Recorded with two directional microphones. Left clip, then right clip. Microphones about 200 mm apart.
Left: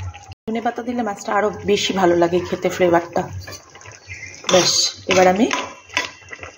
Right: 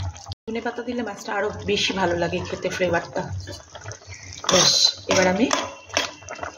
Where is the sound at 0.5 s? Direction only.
20° left (ahead or behind).